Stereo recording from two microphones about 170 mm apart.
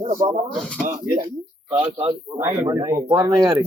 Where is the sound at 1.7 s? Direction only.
35° right (ahead or behind).